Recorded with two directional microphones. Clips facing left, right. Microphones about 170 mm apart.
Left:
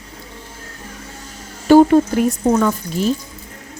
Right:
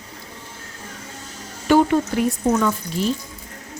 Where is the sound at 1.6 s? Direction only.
40° left (ahead or behind).